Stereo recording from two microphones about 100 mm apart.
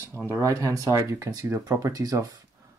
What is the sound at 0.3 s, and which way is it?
Speech, 30° right (ahead or behind).